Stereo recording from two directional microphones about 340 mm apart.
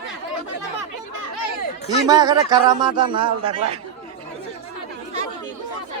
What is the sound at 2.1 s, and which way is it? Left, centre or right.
A man's voice, centre.